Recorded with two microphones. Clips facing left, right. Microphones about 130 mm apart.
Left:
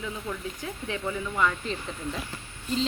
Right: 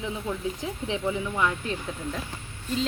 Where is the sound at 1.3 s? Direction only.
10° right (ahead or behind).